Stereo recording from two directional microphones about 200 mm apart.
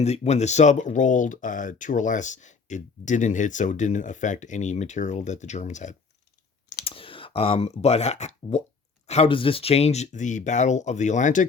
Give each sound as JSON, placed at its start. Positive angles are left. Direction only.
{"t": 0.0, "sound": "speech", "side_deg": 35}